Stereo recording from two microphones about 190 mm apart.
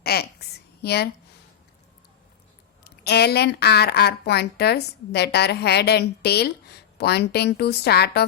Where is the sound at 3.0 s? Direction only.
60° left (ahead or behind).